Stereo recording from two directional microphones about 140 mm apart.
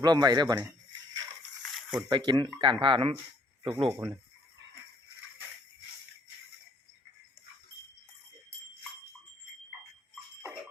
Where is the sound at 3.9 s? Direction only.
20° right (ahead or behind).